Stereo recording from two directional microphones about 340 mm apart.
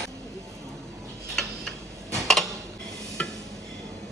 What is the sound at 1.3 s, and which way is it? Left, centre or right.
Tick-tock, centre.